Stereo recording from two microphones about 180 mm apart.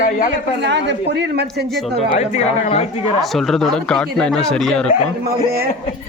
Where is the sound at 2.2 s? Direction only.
35° left (ahead or behind).